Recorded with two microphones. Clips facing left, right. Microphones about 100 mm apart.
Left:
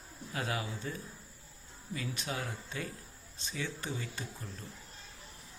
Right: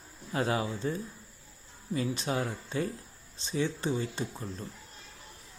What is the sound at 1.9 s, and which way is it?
Speech, 30° right (ahead or behind).